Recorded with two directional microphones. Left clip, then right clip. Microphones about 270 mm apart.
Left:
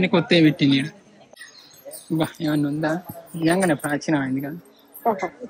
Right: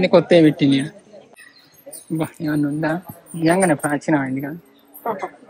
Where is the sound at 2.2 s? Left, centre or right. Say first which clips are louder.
Right 1 dB; centre.